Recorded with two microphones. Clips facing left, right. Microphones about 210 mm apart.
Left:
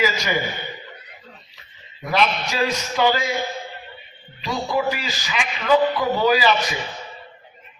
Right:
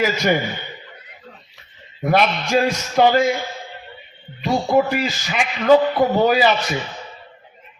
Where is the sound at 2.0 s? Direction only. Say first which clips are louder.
Right 4 dB; 55° right (ahead or behind).